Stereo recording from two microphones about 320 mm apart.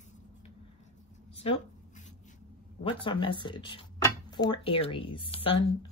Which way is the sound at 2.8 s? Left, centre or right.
Centre.